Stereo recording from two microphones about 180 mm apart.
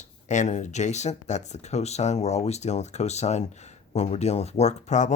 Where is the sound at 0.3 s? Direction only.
40° left (ahead or behind).